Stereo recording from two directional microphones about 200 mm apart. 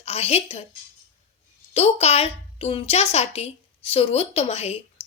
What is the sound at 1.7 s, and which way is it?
A woman's voice, 30° left (ahead or behind).